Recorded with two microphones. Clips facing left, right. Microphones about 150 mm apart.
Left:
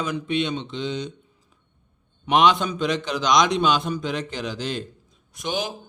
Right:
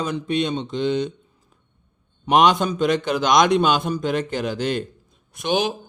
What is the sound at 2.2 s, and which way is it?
A man's voice, 45° right (ahead or behind).